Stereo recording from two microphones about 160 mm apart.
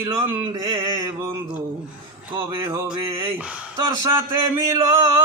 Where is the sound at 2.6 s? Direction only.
30° right (ahead or behind).